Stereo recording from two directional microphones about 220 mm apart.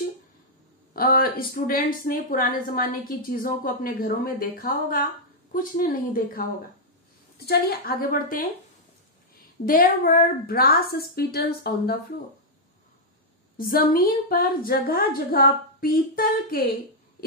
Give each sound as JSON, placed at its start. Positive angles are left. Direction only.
{"t": 0.9, "sound": "a woman's voice", "side_deg": 40}
{"t": 7.4, "sound": "a woman's voice", "side_deg": 45}
{"t": 9.7, "sound": "a woman's voice", "side_deg": 40}
{"t": 13.6, "sound": "a woman's voice", "side_deg": 40}